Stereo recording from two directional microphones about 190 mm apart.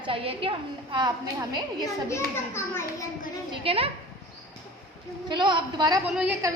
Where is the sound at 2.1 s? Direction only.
15° left (ahead or behind).